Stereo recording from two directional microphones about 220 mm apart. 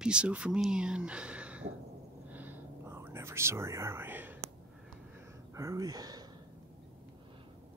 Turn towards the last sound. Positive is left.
turn(degrees=-15)  # may be behind; listen again after turning